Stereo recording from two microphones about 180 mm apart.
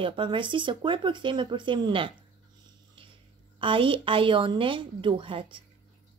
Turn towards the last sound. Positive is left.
turn(degrees=-30)  # may be behind; listen again after turning